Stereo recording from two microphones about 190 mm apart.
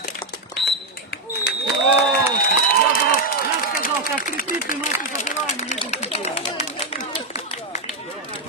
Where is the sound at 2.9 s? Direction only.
50° left (ahead or behind).